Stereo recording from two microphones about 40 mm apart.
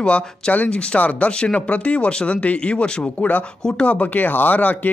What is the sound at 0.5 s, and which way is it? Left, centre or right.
Speech, left.